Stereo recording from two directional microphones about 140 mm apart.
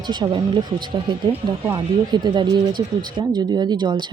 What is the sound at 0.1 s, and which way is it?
Speech, 30° right (ahead or behind).